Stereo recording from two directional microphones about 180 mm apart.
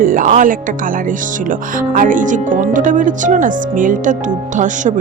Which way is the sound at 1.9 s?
45° right (ahead or behind).